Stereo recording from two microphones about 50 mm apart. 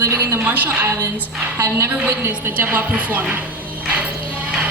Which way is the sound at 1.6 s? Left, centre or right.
Right.